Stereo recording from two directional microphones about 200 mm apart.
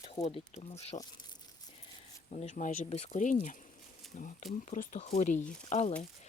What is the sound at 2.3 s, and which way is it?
Speech, 40° left (ahead or behind).